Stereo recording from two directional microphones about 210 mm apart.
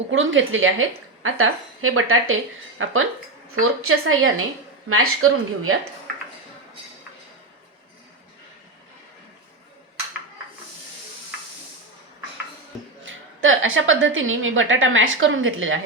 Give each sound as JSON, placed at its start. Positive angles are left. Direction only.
{"t": 0.1, "sound": "a woman's voice", "side_deg": -65}
{"t": 3.6, "sound": "speech", "side_deg": -85}
{"t": 13.1, "sound": "a woman's voice", "side_deg": -70}